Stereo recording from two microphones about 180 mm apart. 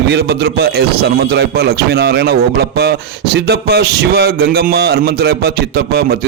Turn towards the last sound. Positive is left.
turn(degrees=-60)  # may be behind; listen again after turning